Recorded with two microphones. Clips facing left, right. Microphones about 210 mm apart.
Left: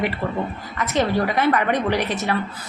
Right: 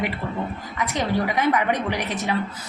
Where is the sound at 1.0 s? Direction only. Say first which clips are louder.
Left 3 dB; 15° right (ahead or behind).